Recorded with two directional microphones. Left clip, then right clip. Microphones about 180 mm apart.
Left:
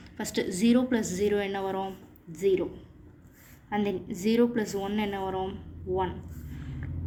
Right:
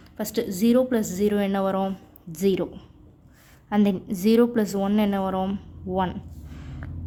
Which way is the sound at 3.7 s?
55° right (ahead or behind).